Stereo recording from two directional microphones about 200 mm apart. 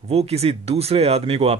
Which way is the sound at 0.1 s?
30° right (ahead or behind).